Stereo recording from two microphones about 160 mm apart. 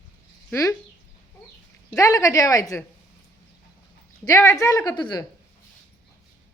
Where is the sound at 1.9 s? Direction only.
20° left (ahead or behind).